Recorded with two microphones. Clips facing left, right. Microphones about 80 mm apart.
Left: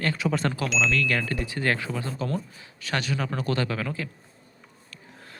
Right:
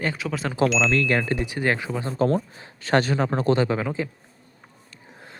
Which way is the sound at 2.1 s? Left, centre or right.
Right.